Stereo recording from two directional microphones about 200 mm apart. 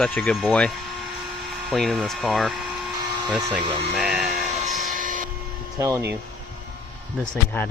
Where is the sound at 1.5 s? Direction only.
Centre (ahead or behind).